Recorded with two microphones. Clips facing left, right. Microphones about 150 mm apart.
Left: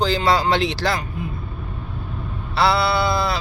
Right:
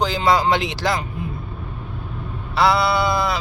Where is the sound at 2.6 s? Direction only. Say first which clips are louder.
Right 1 dB; 15° right (ahead or behind).